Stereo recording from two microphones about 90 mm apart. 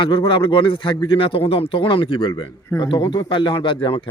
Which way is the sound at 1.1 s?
90° left.